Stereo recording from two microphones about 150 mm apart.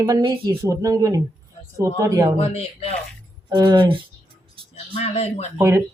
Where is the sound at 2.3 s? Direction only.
40° left (ahead or behind).